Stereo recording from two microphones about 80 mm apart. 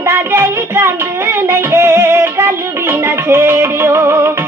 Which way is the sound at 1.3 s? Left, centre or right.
Right.